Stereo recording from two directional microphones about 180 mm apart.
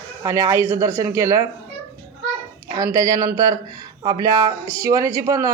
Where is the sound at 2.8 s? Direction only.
20° right (ahead or behind).